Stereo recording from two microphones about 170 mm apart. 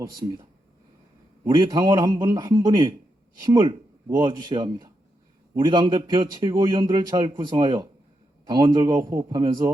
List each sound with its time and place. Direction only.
1.5 s a man's voice: 25° right (ahead or behind)